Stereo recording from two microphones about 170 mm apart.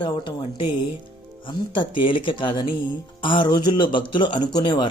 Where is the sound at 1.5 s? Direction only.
30° left (ahead or behind).